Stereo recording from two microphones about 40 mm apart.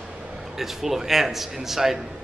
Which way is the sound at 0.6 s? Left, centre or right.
Centre.